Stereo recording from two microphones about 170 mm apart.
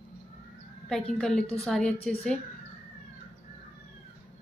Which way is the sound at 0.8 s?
5° left (ahead or behind).